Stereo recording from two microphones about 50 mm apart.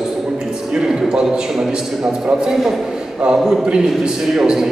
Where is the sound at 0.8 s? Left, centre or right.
Centre.